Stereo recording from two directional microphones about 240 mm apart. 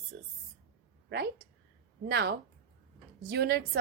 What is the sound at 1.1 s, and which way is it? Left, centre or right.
A woman's voice, right.